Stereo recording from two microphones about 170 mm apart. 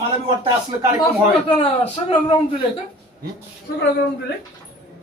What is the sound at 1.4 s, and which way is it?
Speech, 35° left (ahead or behind).